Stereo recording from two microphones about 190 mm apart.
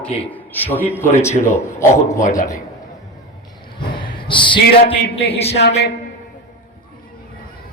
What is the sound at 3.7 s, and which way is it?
Speech, 25° left (ahead or behind).